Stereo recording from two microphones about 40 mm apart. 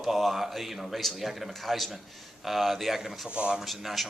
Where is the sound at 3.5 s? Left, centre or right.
Centre.